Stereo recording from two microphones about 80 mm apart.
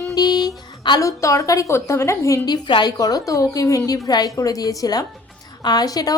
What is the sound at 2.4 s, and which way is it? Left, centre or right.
Speech, left.